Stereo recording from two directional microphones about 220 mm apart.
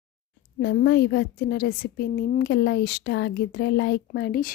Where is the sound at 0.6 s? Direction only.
55° left (ahead or behind).